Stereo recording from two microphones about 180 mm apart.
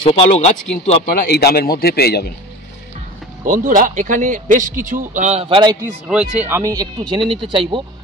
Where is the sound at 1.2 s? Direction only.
60° left (ahead or behind).